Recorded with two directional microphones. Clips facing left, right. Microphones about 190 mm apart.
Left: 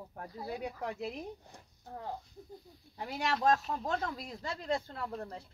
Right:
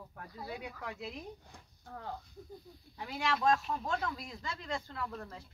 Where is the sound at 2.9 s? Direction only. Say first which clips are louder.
Left 1 dB; 40° left (ahead or behind).